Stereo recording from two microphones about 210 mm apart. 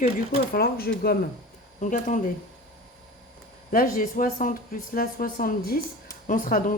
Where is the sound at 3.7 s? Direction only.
40° left (ahead or behind).